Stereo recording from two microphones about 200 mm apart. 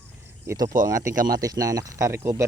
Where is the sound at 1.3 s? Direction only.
20° right (ahead or behind).